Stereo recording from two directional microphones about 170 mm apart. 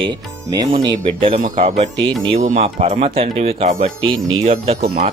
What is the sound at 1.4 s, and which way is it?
Speech, 50° right (ahead or behind).